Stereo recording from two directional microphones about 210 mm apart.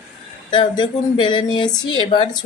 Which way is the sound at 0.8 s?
20° left (ahead or behind).